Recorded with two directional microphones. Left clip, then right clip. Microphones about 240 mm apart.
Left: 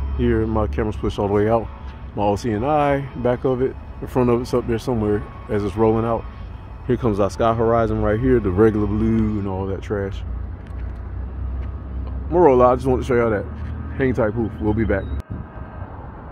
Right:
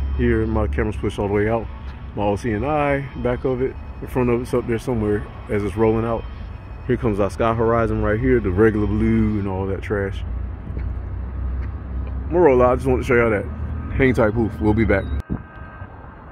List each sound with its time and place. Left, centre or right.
0.4 s speech: centre
12.3 s speech: centre